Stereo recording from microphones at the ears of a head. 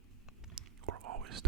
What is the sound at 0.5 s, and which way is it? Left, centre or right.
Whispering, right.